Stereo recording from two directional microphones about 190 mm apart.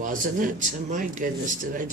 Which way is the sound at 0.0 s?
45° right (ahead or behind).